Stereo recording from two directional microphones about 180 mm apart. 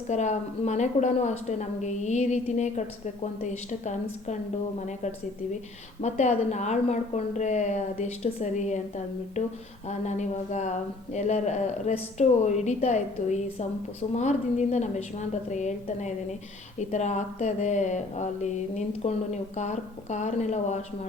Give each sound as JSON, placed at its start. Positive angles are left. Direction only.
{"t": 0.1, "sound": "speech", "side_deg": 40}
{"t": 6.0, "sound": "speech", "side_deg": 40}
{"t": 10.1, "sound": "speech", "side_deg": 40}